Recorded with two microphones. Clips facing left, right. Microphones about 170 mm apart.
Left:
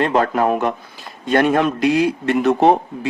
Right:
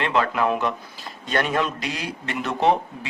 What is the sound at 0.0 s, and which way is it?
A man's voice, 40° left (ahead or behind).